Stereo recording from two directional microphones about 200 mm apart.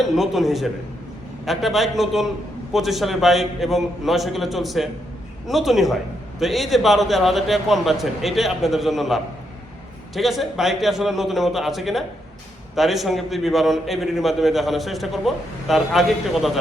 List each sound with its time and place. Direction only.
0.0 s a man's voice: centre (ahead or behind)